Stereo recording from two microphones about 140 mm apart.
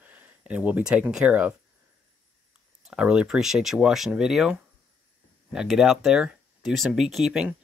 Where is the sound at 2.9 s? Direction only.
5° right (ahead or behind).